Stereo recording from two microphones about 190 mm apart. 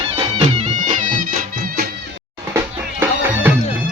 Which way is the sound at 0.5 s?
35° right (ahead or behind).